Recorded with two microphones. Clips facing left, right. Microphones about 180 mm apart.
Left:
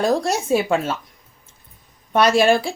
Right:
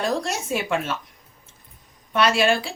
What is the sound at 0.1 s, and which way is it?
Speech, 35° left (ahead or behind).